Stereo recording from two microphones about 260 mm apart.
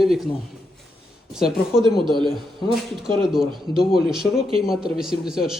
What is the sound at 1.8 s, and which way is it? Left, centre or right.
Speech, centre.